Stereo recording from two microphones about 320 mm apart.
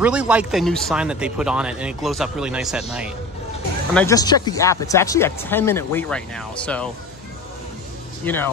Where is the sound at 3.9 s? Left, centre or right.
Centre.